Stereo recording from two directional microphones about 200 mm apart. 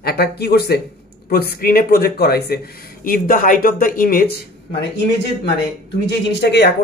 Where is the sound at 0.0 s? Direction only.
55° left (ahead or behind).